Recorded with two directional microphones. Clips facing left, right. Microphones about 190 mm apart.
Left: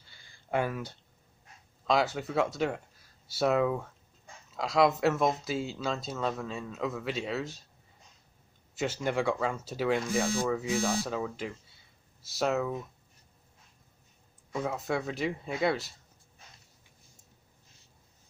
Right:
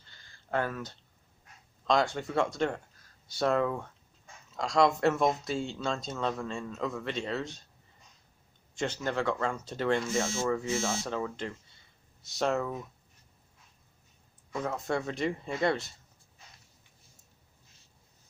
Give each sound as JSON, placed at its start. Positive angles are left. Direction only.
{"t": 0.0, "sound": "a sound", "side_deg": 10}
{"t": 1.9, "sound": "speech", "side_deg": 5}
{"t": 8.7, "sound": "speech", "side_deg": 5}
{"t": 10.2, "sound": "speech", "side_deg": 15}
{"t": 14.5, "sound": "speech", "side_deg": 10}